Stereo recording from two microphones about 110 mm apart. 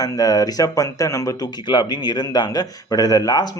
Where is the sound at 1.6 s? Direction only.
40° left (ahead or behind).